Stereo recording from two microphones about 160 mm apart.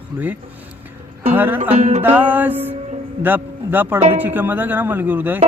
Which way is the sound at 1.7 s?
45° right (ahead or behind).